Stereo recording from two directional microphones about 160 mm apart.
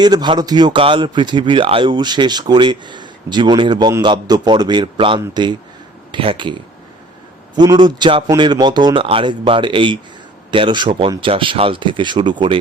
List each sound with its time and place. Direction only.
0.0 s a man's voice: 25° right (ahead or behind)
7.5 s a man's voice: 25° right (ahead or behind)